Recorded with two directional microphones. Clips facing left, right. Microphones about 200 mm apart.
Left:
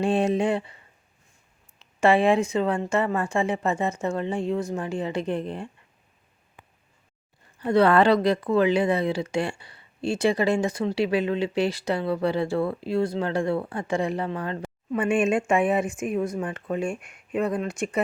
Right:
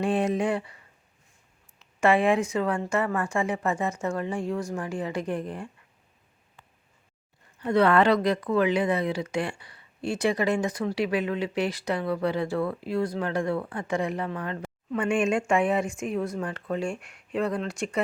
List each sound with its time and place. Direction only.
0.0 s speech: 30° left (ahead or behind)
1.8 s speech: 30° left (ahead or behind)
7.6 s speech: 30° left (ahead or behind)